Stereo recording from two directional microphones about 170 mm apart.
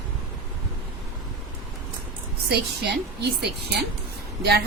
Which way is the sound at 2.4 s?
75° right (ahead or behind).